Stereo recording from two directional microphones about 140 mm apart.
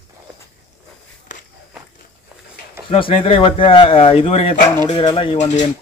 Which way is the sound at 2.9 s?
40° left (ahead or behind).